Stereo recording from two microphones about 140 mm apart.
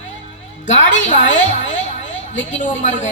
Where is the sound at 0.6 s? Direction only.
60° left (ahead or behind).